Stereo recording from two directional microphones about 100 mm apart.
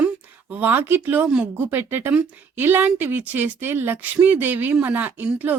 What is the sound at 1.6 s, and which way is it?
A woman's voice, 20° right (ahead or behind).